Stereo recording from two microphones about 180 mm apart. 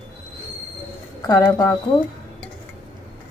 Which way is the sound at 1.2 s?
20° left (ahead or behind).